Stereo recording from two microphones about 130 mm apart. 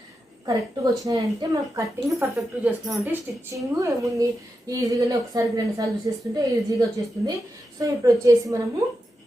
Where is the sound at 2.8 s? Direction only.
25° right (ahead or behind).